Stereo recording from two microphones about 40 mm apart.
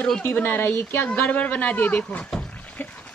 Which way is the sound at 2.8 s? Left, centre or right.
Left.